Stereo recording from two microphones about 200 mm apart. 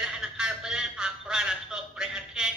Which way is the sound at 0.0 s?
5° right (ahead or behind).